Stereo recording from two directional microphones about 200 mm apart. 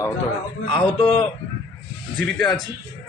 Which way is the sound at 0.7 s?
25° left (ahead or behind).